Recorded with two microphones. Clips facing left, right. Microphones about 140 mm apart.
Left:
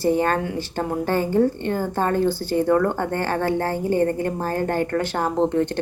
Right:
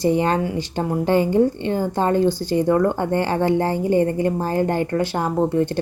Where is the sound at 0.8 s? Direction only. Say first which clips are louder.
Right 4 dB; 15° right (ahead or behind).